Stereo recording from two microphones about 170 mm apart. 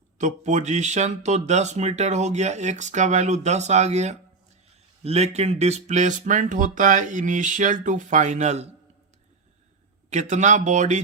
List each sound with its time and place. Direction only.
0.2 s speech: 45° right (ahead or behind)
10.1 s speech: 45° right (ahead or behind)